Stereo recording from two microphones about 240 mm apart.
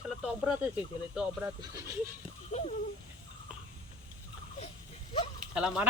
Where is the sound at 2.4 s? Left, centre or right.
Left.